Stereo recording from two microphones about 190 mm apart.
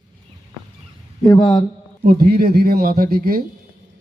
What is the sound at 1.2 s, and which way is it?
Speech, 20° left (ahead or behind).